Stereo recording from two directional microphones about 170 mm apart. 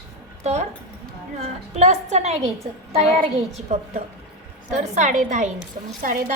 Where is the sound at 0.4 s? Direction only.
40° right (ahead or behind).